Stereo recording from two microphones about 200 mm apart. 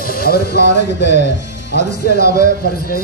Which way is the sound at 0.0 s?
50° left (ahead or behind).